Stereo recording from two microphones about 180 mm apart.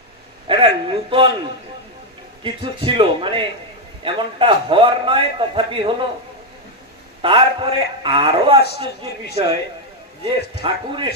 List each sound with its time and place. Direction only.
0.5 s a man's voice: 30° right (ahead or behind)
2.4 s a man's voice: 30° right (ahead or behind)
7.2 s a man's voice: 30° right (ahead or behind)
10.2 s a man's voice: 30° right (ahead or behind)